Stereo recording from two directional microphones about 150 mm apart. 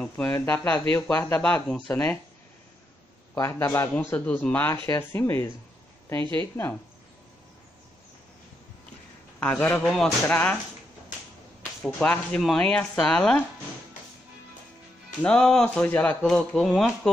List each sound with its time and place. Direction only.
0.0 s speech: 10° left (ahead or behind)
3.3 s speech: 15° left (ahead or behind)
9.4 s speech: 10° left (ahead or behind)
11.8 s speech: 10° left (ahead or behind)
15.2 s speech: 5° left (ahead or behind)